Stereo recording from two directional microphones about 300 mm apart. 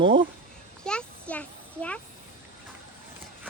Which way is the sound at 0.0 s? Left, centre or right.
Centre.